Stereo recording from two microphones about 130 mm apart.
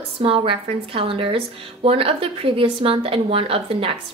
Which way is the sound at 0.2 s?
45° right (ahead or behind).